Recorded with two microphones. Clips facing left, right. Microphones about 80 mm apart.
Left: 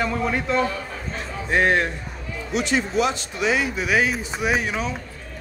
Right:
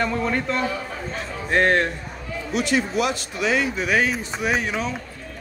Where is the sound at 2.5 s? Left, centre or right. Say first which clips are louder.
Right 1 dB; left.